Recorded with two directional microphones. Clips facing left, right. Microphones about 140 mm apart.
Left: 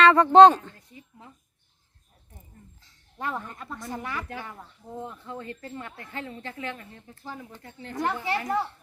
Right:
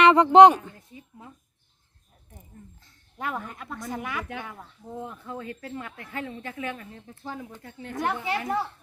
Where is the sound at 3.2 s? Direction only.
10° right (ahead or behind).